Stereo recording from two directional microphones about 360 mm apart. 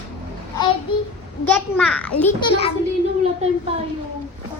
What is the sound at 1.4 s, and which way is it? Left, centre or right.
A child's voice, centre.